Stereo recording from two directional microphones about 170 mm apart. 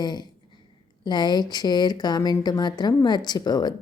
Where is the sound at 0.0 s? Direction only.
25° left (ahead or behind).